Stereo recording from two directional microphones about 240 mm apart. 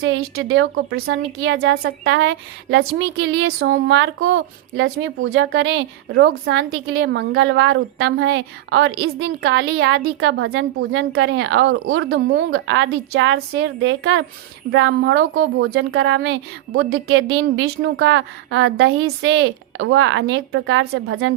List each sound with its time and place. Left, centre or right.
0.0 s a woman's voice: right